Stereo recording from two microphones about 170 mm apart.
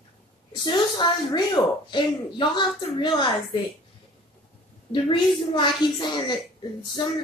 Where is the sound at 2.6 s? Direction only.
30° left (ahead or behind).